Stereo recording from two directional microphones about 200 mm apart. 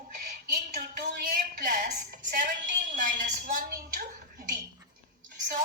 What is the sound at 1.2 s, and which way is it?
A woman's voice, 45° right (ahead or behind).